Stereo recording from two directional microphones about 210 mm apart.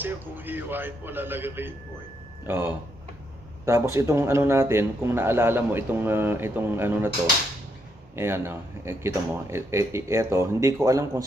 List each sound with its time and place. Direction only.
0.0 s a man's voice: 10° right (ahead or behind)
8.2 s a man's voice: 10° right (ahead or behind)